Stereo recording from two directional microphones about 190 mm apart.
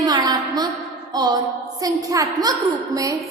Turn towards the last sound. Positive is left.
turn(degrees=-20)  # may be behind; listen again after turning